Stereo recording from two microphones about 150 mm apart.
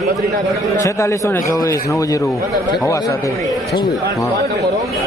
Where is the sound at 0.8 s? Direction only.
20° left (ahead or behind).